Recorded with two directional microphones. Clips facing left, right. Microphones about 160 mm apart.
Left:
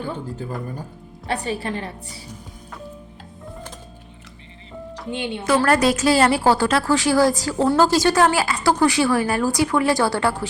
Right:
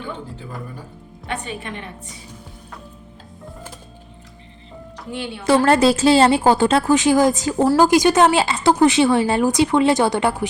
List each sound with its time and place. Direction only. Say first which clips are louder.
0.0 s a woman's voice: left 3 dB; 40° left (ahead or behind)
5.1 s a woman's voice: left 2 dB; 20° left (ahead or behind)
5.5 s a woman's voice: right 3 dB; 25° right (ahead or behind)